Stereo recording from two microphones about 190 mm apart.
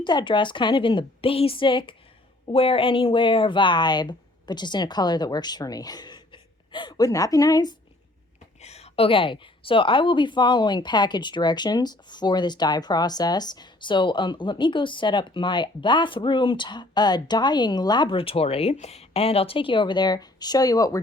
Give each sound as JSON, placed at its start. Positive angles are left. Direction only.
{"t": 0.0, "sound": "a woman's voice", "side_deg": 25}
{"t": 8.6, "sound": "a woman's voice", "side_deg": 35}